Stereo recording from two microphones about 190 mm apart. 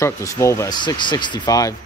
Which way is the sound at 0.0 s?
15° left (ahead or behind).